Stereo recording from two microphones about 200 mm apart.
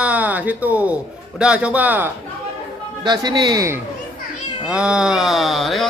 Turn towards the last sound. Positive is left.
turn(degrees=0)  # may be behind; listen again after turning